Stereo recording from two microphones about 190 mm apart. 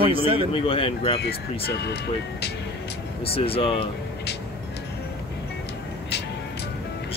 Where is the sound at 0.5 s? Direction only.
30° left (ahead or behind).